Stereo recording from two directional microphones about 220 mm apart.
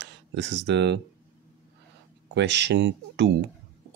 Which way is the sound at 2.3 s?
55° right (ahead or behind).